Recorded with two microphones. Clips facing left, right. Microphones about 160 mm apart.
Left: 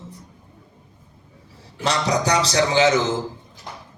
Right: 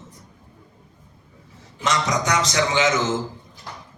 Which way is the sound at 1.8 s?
35° left (ahead or behind).